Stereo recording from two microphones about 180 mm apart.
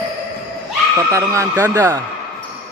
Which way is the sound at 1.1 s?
15° right (ahead or behind).